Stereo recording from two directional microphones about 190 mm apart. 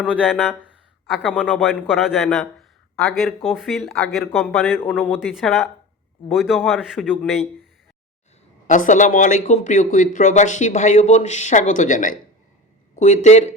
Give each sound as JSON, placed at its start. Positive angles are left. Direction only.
{"t": 0.0, "sound": "speech", "side_deg": -5}
{"t": 8.6, "sound": "speech", "side_deg": 40}